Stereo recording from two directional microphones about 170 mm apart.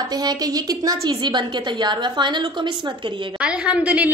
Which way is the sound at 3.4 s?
5° right (ahead or behind).